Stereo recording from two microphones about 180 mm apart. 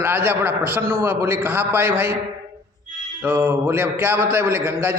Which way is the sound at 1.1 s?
10° right (ahead or behind).